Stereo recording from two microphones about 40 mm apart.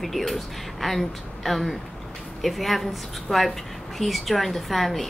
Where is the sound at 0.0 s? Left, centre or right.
Centre.